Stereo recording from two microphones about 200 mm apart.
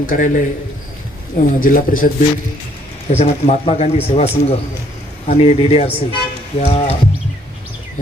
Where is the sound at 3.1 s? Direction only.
30° left (ahead or behind).